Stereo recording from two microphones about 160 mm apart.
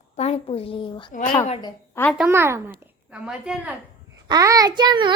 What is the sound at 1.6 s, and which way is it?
Speech, 15° left (ahead or behind).